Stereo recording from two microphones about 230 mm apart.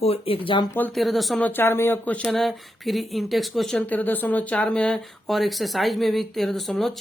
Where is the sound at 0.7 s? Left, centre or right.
Centre.